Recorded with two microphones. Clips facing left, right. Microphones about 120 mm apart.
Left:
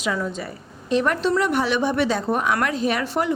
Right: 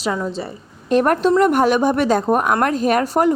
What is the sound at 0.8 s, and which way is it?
Speech, 50° right (ahead or behind).